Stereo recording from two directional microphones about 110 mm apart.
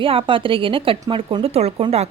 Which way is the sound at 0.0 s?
55° right (ahead or behind).